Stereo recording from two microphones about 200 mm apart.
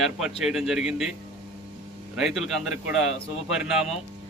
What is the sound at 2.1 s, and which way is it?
Speech, centre (ahead or behind).